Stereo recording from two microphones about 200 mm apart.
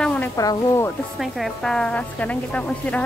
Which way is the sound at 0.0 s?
10° left (ahead or behind).